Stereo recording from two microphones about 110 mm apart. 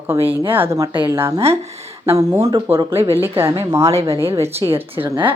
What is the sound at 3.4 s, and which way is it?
Speech, 25° right (ahead or behind).